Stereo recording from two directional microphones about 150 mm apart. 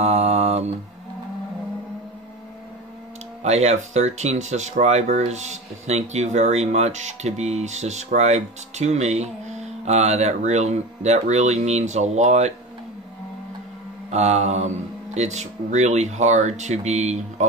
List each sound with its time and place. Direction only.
0.0 s a sound: 45° right (ahead or behind)
3.4 s speech: 50° right (ahead or behind)
14.1 s speech: 45° right (ahead or behind)